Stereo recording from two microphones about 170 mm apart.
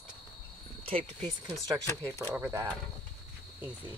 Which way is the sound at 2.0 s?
15° right (ahead or behind).